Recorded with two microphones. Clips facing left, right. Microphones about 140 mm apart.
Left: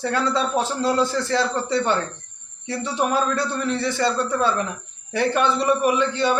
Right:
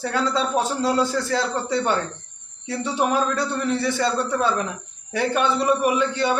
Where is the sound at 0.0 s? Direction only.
5° right (ahead or behind).